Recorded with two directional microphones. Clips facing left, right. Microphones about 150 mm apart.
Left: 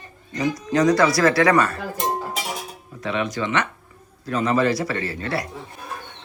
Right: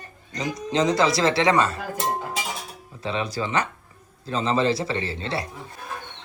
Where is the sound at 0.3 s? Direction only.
25° right (ahead or behind).